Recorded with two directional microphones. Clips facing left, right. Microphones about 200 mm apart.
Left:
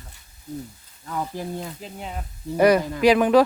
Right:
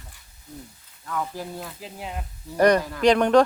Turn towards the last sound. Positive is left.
turn(degrees=5)  # may be behind; listen again after turning